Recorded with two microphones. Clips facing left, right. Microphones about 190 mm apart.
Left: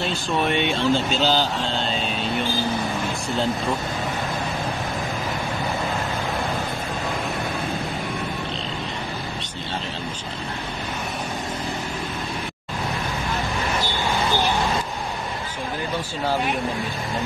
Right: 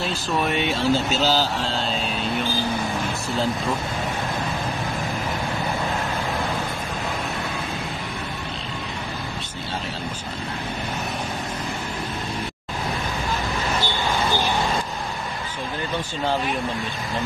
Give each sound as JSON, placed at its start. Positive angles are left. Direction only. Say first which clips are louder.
{"t": 0.0, "sound": "speech", "louder": "left 1 dB", "side_deg": 0}